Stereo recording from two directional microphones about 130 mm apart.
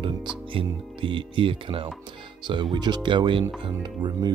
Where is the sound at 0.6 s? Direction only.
40° right (ahead or behind).